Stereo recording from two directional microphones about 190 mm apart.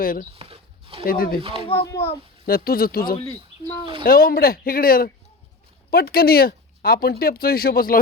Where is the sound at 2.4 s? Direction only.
50° left (ahead or behind).